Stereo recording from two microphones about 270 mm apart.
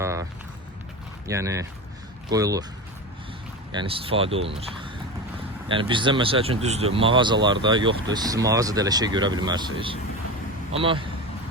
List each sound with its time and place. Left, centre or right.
0.0 s a sound: centre
1.3 s speech: centre
3.7 s speech: centre